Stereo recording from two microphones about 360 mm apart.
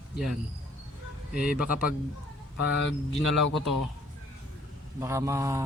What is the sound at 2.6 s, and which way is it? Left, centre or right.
Speech, left.